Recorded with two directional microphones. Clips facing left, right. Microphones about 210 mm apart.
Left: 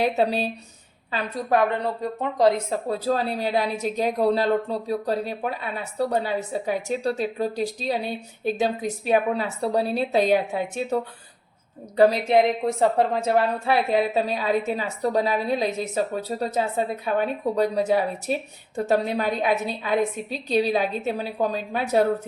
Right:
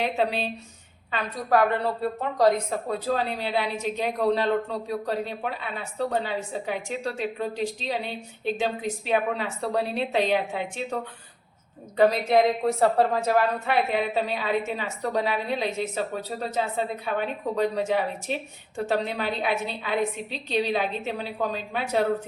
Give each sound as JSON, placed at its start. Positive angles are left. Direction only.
{"t": 0.0, "sound": "a woman's voice", "side_deg": 40}
{"t": 1.1, "sound": "a woman's voice", "side_deg": 25}
{"t": 2.6, "sound": "a woman's voice", "side_deg": 30}
{"t": 11.9, "sound": "a woman's voice", "side_deg": 30}
{"t": 13.9, "sound": "a woman's voice", "side_deg": 35}